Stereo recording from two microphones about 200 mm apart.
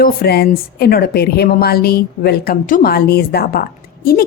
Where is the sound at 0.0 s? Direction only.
50° left (ahead or behind).